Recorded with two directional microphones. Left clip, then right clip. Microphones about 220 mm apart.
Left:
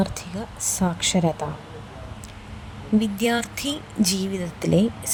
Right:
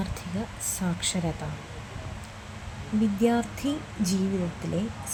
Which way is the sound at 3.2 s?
45° left (ahead or behind).